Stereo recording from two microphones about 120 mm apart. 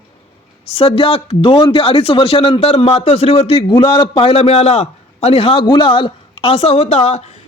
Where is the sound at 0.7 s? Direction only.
55° left (ahead or behind).